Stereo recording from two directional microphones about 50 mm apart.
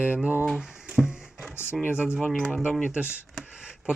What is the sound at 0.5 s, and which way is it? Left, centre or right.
Speech, centre.